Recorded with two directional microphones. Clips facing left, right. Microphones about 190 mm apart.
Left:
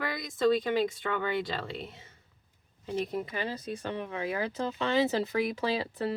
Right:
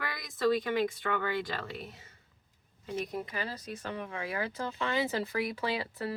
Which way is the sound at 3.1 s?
25° left (ahead or behind).